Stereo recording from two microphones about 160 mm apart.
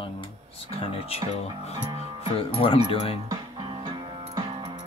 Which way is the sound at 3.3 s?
30° right (ahead or behind).